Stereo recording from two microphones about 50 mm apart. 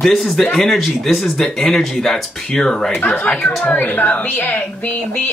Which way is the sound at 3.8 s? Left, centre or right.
Left.